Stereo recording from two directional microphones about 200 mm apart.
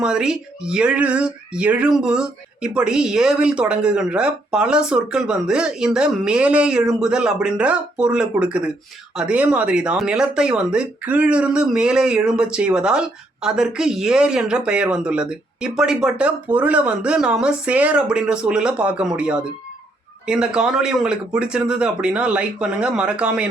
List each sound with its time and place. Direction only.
0.0 s speech: 5° right (ahead or behind)